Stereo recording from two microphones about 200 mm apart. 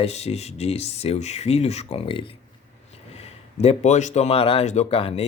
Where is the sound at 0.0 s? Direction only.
30° left (ahead or behind).